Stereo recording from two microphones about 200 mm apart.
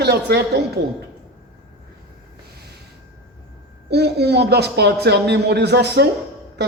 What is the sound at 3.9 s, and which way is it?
A man's voice, 55° right (ahead or behind).